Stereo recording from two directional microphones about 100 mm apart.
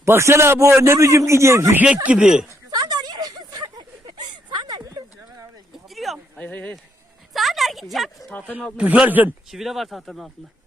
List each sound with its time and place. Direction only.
0.0 s a man's voice: 30° right (ahead or behind)
2.0 s speech: 10° right (ahead or behind)
2.6 s a sound: 40° right (ahead or behind)
4.8 s a sound: 35° right (ahead or behind)
5.9 s a sound: centre (ahead or behind)
6.3 s speech: 15° left (ahead or behind)
7.3 s speech: centre (ahead or behind)
8.3 s speech: 15° left (ahead or behind)
8.8 s speech: 15° right (ahead or behind)
9.5 s speech: centre (ahead or behind)